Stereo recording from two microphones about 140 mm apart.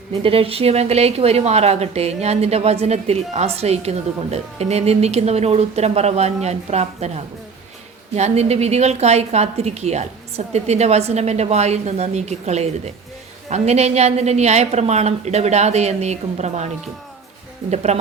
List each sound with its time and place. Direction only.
0.2 s speech: 40° right (ahead or behind)
8.1 s speech: 50° right (ahead or behind)